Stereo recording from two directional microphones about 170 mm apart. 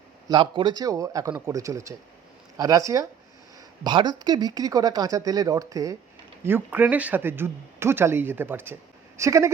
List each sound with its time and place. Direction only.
0.3 s speech: 30° right (ahead or behind)